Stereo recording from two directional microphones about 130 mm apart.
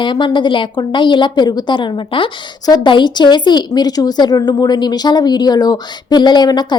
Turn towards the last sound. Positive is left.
turn(degrees=35)  # may be behind; listen again after turning